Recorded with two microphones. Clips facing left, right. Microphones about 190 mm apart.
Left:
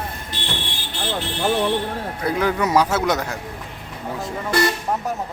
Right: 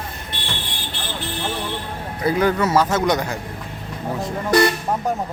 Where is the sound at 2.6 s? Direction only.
15° left (ahead or behind).